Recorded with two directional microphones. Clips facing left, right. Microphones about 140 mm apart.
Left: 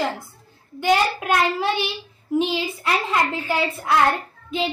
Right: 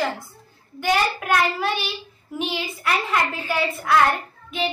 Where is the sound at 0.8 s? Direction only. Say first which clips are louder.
Left 2 dB; 20° left (ahead or behind).